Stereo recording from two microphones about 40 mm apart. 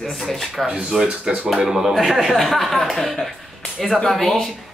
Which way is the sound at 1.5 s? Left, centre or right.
Centre.